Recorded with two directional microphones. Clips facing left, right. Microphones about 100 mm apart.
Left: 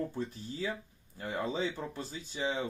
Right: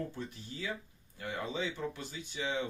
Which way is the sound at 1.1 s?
35° left (ahead or behind).